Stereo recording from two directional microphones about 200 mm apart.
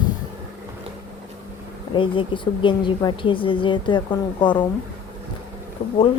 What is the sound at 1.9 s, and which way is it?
A woman's voice, 25° left (ahead or behind).